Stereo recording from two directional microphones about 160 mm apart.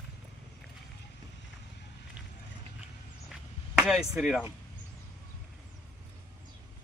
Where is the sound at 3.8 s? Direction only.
5° right (ahead or behind).